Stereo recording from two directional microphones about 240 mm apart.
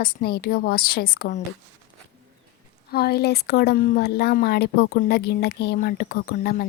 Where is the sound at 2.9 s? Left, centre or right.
Left.